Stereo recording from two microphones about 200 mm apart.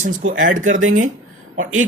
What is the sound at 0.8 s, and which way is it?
Speech, 90° right.